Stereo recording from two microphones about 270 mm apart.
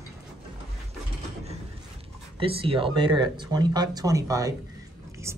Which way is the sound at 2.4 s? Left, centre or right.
Centre.